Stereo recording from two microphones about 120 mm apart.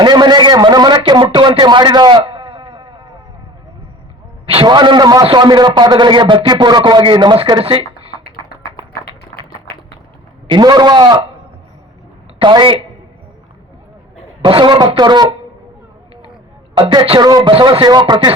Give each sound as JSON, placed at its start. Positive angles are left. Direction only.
{"t": 0.0, "sound": "a sound", "side_deg": -35}
{"t": 4.4, "sound": "a man's voice", "side_deg": -45}
{"t": 7.6, "sound": "speech", "side_deg": -50}
{"t": 10.5, "sound": "a man's voice", "side_deg": -35}
{"t": 12.4, "sound": "a man's voice", "side_deg": -40}
{"t": 14.4, "sound": "a man's voice", "side_deg": -40}
{"t": 16.7, "sound": "a man's voice", "side_deg": -40}